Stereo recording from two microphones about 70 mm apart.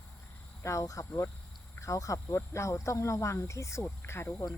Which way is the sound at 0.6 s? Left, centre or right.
Left.